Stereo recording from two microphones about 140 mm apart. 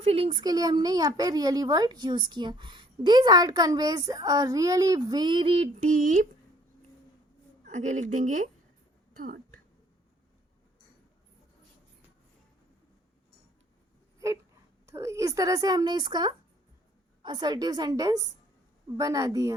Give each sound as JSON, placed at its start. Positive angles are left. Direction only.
{"t": 0.0, "sound": "speech", "side_deg": -45}
{"t": 5.8, "sound": "speech", "side_deg": -70}
{"t": 7.6, "sound": "a woman's voice", "side_deg": -60}
{"t": 9.1, "sound": "speech", "side_deg": -80}
{"t": 14.8, "sound": "speech", "side_deg": -20}